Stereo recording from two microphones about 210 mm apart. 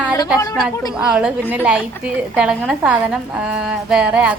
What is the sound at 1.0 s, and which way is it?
A woman's voice, 5° right (ahead or behind).